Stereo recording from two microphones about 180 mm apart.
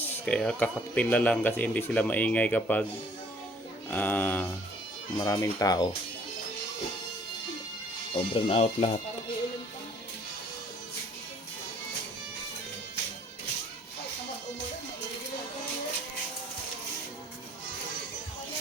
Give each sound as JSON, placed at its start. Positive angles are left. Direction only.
{"t": 0.0, "sound": "speech", "side_deg": 5}
{"t": 3.8, "sound": "speech", "side_deg": 10}
{"t": 8.1, "sound": "speech", "side_deg": 30}